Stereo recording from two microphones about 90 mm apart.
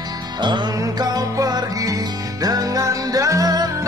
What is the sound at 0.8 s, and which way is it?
Music, 45° right (ahead or behind).